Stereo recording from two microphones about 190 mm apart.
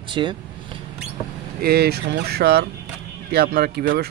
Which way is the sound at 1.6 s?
55° right (ahead or behind).